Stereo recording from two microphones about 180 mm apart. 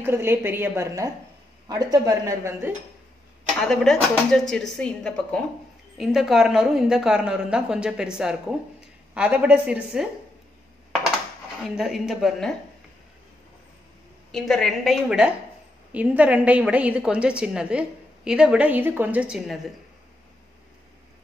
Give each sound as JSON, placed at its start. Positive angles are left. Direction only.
{"t": 0.0, "sound": "a woman's voice", "side_deg": -15}
{"t": 3.6, "sound": "a woman's voice", "side_deg": 0}
{"t": 11.6, "sound": "a woman's voice", "side_deg": 0}
{"t": 14.3, "sound": "a woman's voice", "side_deg": 0}